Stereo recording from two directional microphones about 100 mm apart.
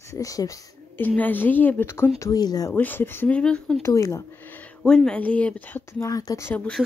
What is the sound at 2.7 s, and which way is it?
Speech, 20° left (ahead or behind).